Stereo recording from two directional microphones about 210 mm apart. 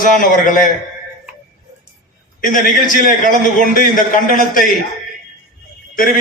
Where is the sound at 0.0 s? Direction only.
40° left (ahead or behind).